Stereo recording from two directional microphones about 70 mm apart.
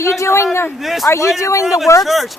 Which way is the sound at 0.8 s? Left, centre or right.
Centre.